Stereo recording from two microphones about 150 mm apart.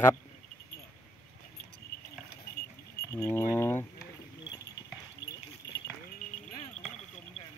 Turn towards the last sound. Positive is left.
turn(degrees=20)  # may be behind; listen again after turning